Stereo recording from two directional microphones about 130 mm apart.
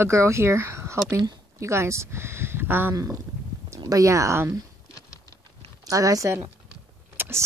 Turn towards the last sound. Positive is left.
turn(degrees=-20)  # may be behind; listen again after turning